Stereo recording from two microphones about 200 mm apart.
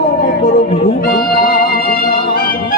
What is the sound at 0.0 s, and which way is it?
Music, 50° left (ahead or behind).